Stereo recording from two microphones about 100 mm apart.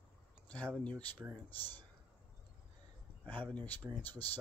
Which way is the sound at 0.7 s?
15° left (ahead or behind).